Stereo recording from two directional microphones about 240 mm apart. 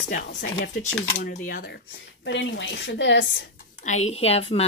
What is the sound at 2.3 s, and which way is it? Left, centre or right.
Speech, left.